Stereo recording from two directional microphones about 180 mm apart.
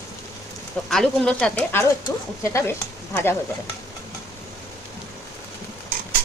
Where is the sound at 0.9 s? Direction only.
Centre (ahead or behind).